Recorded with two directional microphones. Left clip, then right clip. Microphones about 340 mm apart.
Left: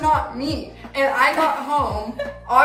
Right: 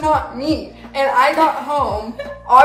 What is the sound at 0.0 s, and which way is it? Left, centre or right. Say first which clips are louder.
A woman's voice: right 2 dB; centre.